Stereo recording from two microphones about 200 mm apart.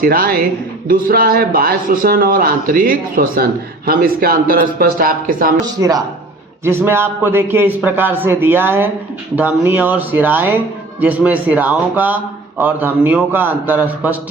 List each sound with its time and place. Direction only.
0.0 s speech: 45° right (ahead or behind)
5.8 s a man's voice: 15° right (ahead or behind)